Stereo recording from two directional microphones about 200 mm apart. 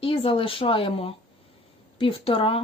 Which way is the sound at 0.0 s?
25° left (ahead or behind).